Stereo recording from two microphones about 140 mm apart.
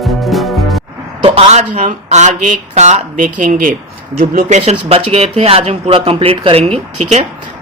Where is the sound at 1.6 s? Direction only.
60° right (ahead or behind).